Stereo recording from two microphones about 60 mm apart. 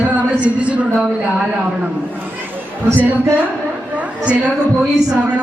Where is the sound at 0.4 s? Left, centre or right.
Right.